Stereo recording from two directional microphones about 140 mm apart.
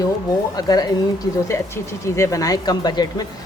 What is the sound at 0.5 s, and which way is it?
A woman's voice, 25° left (ahead or behind).